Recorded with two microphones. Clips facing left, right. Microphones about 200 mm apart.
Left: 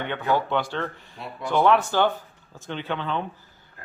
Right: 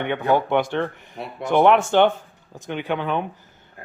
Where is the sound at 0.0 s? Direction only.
20° right (ahead or behind).